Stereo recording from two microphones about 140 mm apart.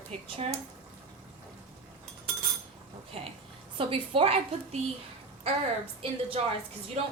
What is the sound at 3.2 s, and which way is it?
A woman's voice, 45° right (ahead or behind).